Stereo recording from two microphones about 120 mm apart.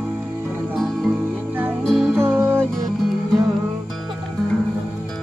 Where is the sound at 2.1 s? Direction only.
20° right (ahead or behind).